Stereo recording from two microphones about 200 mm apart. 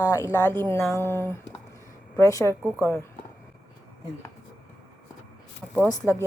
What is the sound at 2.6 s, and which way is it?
Speech, 10° right (ahead or behind).